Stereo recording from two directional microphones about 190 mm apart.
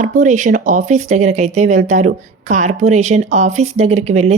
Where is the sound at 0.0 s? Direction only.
40° right (ahead or behind).